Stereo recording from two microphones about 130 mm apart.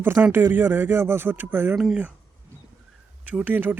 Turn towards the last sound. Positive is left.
turn(degrees=-15)  # may be behind; listen again after turning